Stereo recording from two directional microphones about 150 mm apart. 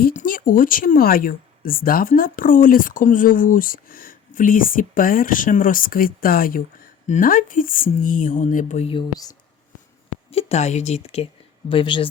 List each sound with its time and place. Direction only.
0.1 s speech: 60° left (ahead or behind)
8.9 s speech: 30° left (ahead or behind)
10.3 s speech: 50° left (ahead or behind)